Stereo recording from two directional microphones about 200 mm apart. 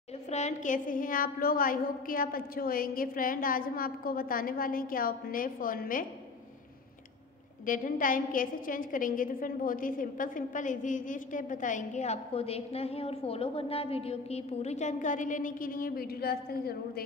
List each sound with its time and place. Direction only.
0.3 s a woman's voice: 35° left (ahead or behind)
7.6 s a woman's voice: 45° left (ahead or behind)